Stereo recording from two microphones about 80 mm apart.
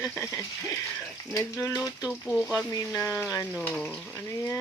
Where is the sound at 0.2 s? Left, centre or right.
Left.